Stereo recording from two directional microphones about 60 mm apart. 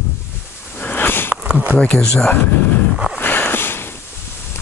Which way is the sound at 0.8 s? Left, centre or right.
Left.